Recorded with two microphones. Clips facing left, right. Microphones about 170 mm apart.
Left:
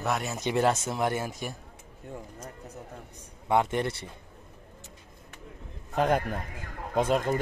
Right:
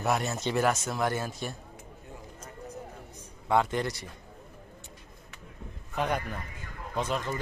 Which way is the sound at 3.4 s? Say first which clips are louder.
Left 1 dB; 20° left (ahead or behind).